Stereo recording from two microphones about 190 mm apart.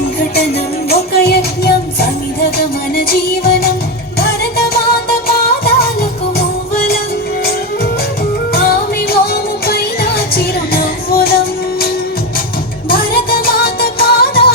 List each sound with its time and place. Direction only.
0.2 s music: 55° left (ahead or behind)
8.5 s music: 55° left (ahead or behind)
12.9 s music: 50° left (ahead or behind)